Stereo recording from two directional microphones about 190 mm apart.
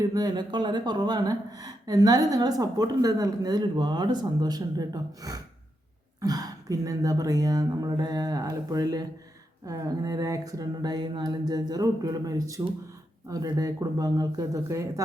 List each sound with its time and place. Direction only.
0.0 s speech: 20° right (ahead or behind)